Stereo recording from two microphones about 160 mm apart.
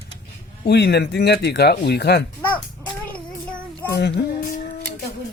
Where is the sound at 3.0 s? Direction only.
10° left (ahead or behind).